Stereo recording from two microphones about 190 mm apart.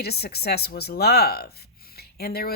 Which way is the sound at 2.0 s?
55° left (ahead or behind).